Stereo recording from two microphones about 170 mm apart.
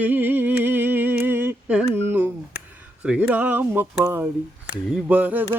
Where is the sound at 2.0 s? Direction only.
10° right (ahead or behind).